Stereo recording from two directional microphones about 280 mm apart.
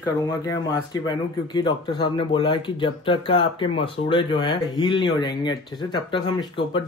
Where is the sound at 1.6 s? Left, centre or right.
Centre.